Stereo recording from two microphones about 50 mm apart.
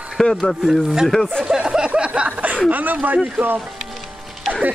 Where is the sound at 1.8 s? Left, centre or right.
Right.